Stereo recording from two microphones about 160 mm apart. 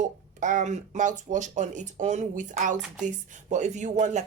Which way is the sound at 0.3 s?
50° right (ahead or behind).